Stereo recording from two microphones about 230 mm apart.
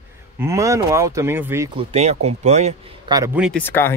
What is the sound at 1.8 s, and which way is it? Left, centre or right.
Speech, right.